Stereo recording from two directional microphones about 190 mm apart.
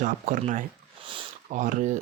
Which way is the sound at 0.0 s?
45° right (ahead or behind).